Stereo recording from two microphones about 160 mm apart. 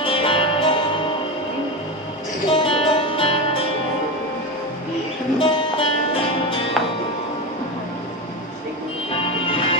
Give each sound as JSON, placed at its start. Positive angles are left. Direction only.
{"t": 0.0, "sound": "music", "side_deg": 35}
{"t": 2.5, "sound": "music", "side_deg": 35}
{"t": 5.4, "sound": "music", "side_deg": 35}
{"t": 9.1, "sound": "music", "side_deg": 35}